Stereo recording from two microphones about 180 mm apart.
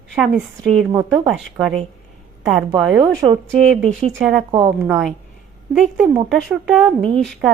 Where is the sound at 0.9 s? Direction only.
20° right (ahead or behind).